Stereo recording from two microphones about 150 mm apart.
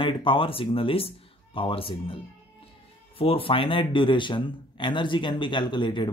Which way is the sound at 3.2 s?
40° left (ahead or behind).